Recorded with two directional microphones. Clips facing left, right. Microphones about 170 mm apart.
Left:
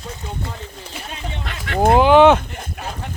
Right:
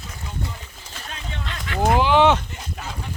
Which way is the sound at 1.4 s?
65° left (ahead or behind).